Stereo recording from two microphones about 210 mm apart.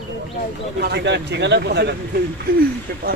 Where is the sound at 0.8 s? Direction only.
50° right (ahead or behind).